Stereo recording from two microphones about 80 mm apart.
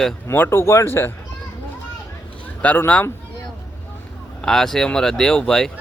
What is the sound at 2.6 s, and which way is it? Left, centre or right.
Speech, left.